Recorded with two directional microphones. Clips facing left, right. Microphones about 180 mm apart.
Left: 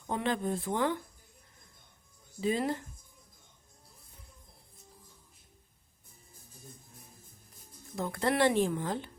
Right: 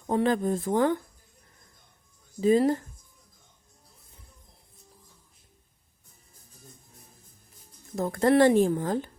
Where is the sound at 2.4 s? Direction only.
40° right (ahead or behind).